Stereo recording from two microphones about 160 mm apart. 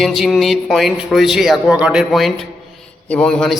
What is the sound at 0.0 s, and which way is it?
A man's voice, centre (ahead or behind).